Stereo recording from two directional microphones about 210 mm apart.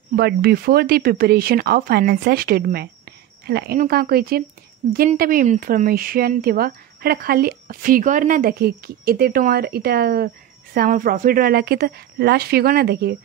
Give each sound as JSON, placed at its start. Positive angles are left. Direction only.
{"t": 0.1, "sound": "speech", "side_deg": -50}